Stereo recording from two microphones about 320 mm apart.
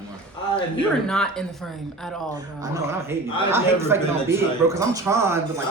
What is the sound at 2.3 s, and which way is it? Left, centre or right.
Speech, centre.